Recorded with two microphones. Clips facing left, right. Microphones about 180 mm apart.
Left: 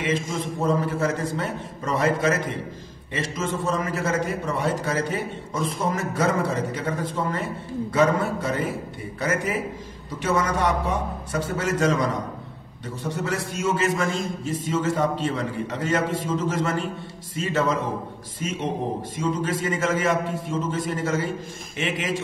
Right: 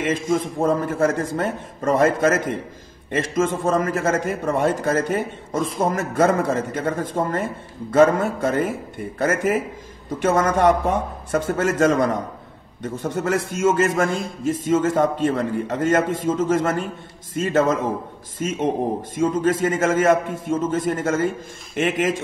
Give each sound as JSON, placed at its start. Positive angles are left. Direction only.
{"t": 0.0, "sound": "a man's voice", "side_deg": -50}